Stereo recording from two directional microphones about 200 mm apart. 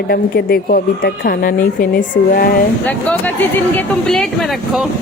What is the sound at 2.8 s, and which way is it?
Speech, 10° left (ahead or behind).